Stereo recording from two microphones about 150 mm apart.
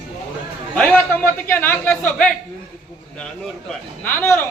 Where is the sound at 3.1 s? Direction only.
5° left (ahead or behind).